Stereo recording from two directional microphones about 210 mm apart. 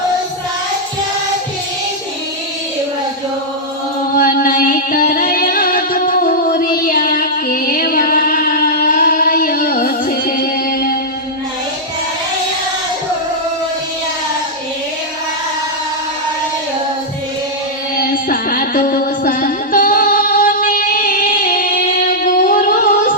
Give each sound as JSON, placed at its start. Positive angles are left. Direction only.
{"t": 4.1, "sound": "music", "side_deg": 40}
{"t": 18.1, "sound": "music", "side_deg": 40}